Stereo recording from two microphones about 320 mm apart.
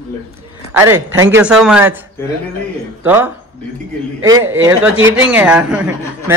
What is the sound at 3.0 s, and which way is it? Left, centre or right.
A man's voice, centre.